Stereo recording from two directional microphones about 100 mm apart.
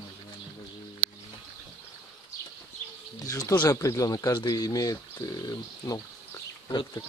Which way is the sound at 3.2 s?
35° left (ahead or behind).